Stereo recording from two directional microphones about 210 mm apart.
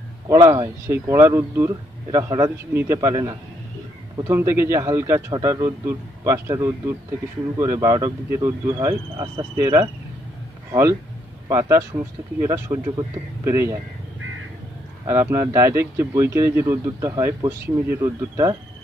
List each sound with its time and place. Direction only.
0.3 s a man's voice: 15° right (ahead or behind)
15.0 s a man's voice: 15° right (ahead or behind)